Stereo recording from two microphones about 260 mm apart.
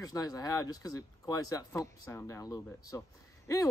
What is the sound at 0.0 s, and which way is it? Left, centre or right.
Speech, centre.